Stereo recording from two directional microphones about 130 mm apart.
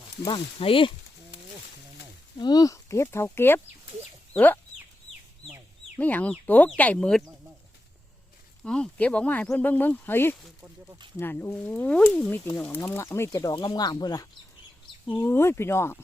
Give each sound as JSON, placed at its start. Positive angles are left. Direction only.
{"t": 0.3, "sound": "speech", "side_deg": 40}
{"t": 2.4, "sound": "speech", "side_deg": 30}
{"t": 6.0, "sound": "speech", "side_deg": 10}
{"t": 8.6, "sound": "speech", "side_deg": 5}
{"t": 15.2, "sound": "speech", "side_deg": 20}